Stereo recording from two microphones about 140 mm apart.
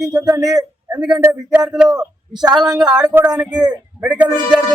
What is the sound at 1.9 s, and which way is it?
Speech, 25° right (ahead or behind).